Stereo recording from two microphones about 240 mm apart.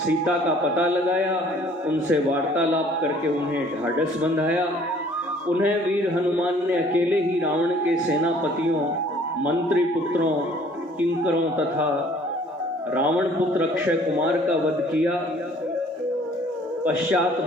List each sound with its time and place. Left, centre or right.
0.8 s a man's voice: centre
6.4 s a man's voice: centre
9.4 s a man's voice: centre
12.9 s a man's voice: centre